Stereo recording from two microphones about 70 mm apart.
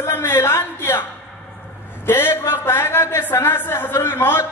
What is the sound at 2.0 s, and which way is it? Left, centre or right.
A woman's voice, left.